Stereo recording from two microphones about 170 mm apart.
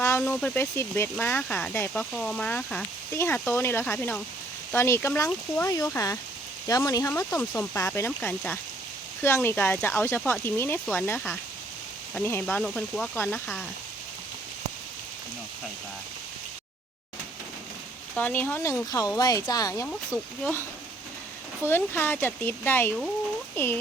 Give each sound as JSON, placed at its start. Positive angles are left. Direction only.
{"t": 0.2, "sound": "speech", "side_deg": 5}
{"t": 18.1, "sound": "speech", "side_deg": 10}